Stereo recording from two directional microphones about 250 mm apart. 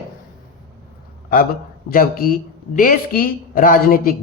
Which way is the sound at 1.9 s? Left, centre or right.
Left.